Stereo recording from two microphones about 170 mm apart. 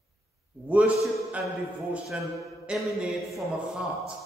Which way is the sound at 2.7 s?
5° right (ahead or behind).